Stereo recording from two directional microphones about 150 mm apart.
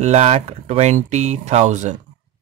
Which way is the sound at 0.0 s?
50° right (ahead or behind).